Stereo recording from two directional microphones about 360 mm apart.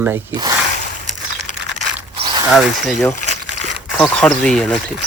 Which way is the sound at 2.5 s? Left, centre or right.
Centre.